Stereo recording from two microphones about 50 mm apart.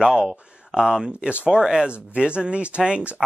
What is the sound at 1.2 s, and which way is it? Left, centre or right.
Speech, right.